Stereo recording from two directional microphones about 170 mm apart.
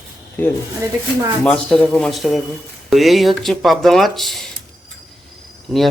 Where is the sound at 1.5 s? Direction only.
5° left (ahead or behind).